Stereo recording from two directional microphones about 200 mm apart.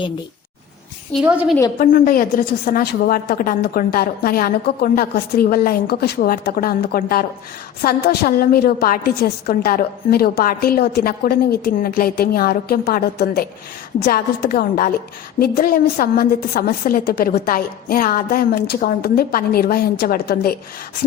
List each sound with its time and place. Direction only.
1.1 s a woman's voice: 5° right (ahead or behind)
1.8 s a woman's voice: 45° left (ahead or behind)